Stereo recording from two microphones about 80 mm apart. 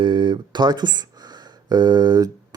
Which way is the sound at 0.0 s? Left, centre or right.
Right.